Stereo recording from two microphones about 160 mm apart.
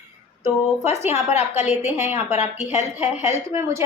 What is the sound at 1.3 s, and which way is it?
Speech, 45° left (ahead or behind).